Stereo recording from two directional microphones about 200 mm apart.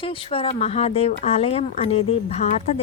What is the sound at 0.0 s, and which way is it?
Speech, 25° left (ahead or behind).